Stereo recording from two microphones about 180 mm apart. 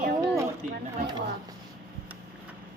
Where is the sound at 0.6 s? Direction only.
45° right (ahead or behind).